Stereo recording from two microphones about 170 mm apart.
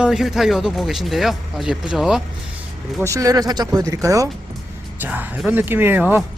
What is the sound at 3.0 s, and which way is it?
Speech, 20° right (ahead or behind).